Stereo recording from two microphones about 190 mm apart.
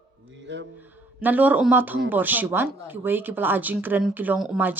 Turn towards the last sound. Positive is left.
turn(degrees=-10)  # may be behind; listen again after turning